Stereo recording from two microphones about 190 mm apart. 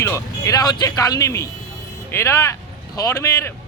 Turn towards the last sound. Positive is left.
turn(degrees=15)  # may be behind; listen again after turning